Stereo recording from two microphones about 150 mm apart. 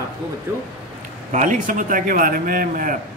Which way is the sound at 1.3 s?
55° right (ahead or behind).